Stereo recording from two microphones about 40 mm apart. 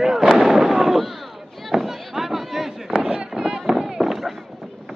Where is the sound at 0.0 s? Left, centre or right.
Centre.